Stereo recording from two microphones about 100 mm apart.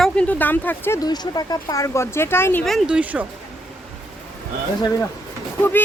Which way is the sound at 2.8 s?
10° right (ahead or behind).